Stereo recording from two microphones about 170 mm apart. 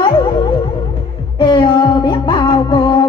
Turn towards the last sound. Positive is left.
turn(degrees=25)  # may be behind; listen again after turning